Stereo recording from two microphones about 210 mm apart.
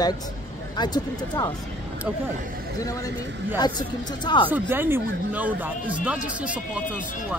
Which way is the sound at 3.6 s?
20° left (ahead or behind).